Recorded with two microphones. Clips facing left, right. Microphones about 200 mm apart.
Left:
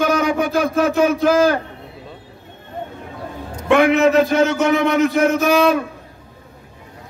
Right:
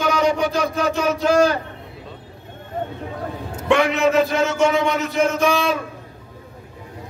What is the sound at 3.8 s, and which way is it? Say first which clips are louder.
Speech: left 6 dB; 50° left (ahead or behind).